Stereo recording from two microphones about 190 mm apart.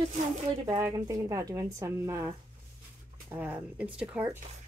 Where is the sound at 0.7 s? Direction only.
20° right (ahead or behind).